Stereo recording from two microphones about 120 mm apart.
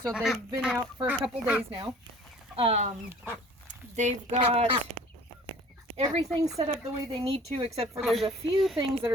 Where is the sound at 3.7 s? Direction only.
80° right.